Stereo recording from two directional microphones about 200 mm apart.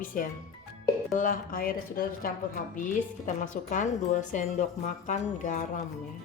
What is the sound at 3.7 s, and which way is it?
A woman's voice, 40° left (ahead or behind).